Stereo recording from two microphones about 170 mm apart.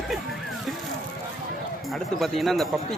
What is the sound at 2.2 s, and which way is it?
Speech, centre (ahead or behind).